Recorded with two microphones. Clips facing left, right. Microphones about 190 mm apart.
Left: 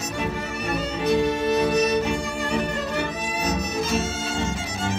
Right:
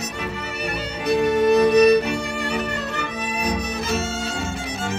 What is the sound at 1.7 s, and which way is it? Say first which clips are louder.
Music: right 6 dB; 65° right (ahead or behind).